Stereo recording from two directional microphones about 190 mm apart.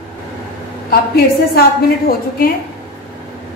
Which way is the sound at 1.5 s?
50° left (ahead or behind).